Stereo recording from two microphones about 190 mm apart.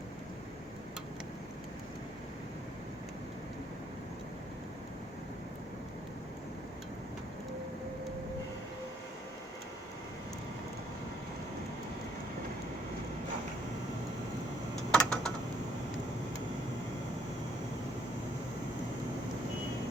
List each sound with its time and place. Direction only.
14.9 s typing: 5° left (ahead or behind)